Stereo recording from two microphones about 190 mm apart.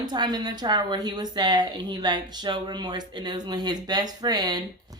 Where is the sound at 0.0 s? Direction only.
20° right (ahead or behind).